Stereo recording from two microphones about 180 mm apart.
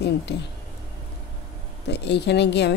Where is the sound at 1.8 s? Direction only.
70° left (ahead or behind).